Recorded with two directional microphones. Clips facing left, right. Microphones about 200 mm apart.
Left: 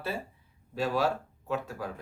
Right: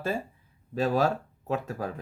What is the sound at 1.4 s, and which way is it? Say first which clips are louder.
Speech: right 3 dB; 40° right (ahead or behind).